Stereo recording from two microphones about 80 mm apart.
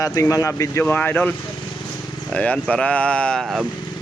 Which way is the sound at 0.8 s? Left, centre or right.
Left.